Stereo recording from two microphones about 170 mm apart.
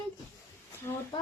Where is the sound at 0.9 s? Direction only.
20° left (ahead or behind).